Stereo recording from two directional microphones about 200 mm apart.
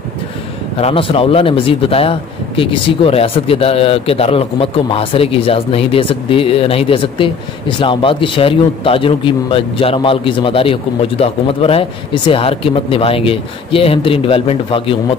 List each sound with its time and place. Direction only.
0.7 s a man's voice: 30° left (ahead or behind)